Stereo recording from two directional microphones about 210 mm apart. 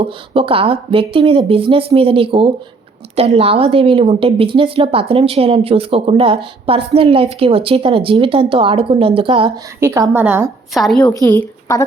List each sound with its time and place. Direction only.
0.0 s a woman's voice: 25° right (ahead or behind)
9.8 s a woman's voice: 15° right (ahead or behind)
10.8 s a woman's voice: centre (ahead or behind)
11.1 s a woman's voice: 10° left (ahead or behind)